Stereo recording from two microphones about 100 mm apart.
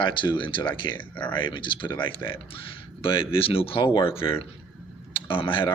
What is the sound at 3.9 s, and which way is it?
Speech, 55° left (ahead or behind).